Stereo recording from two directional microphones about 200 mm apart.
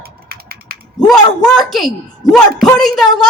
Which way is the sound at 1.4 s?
Centre (ahead or behind).